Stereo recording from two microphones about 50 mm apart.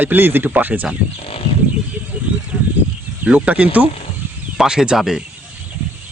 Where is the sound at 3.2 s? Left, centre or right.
Right.